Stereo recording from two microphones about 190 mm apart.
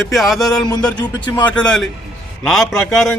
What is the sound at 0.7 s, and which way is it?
Speech, 20° left (ahead or behind).